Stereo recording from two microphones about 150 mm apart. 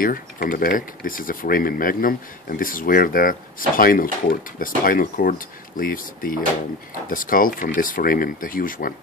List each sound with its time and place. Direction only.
0.0 s speech: 70° left (ahead or behind)